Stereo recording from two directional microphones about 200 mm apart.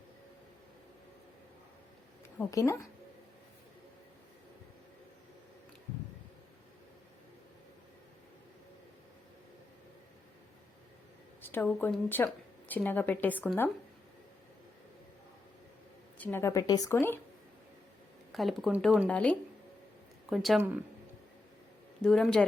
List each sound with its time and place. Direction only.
2.4 s a woman's voice: 15° left (ahead or behind)
11.4 s a woman's voice: 10° left (ahead or behind)
16.1 s a woman's voice: 10° left (ahead or behind)
18.3 s speech: centre (ahead or behind)
19.0 s a woman's voice: 5° left (ahead or behind)
22.0 s speech: 5° left (ahead or behind)